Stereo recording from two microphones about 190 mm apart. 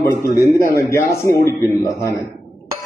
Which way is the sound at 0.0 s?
15° left (ahead or behind).